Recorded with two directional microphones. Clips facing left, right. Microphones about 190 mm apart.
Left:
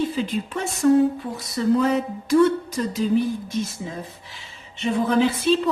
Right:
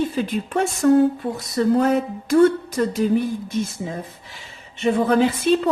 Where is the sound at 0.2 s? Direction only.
55° right (ahead or behind).